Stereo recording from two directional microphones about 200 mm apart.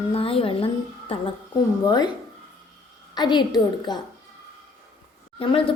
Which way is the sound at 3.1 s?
20° left (ahead or behind).